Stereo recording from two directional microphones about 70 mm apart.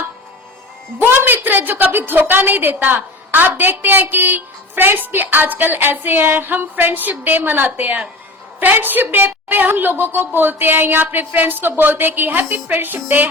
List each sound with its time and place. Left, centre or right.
0.9 s a woman's voice: right